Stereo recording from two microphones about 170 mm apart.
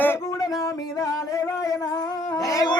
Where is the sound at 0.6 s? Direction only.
20° left (ahead or behind).